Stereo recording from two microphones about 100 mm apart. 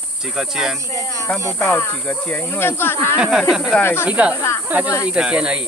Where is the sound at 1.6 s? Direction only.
15° left (ahead or behind).